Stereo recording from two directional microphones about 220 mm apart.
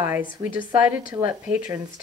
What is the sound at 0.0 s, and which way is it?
Speech, 10° right (ahead or behind).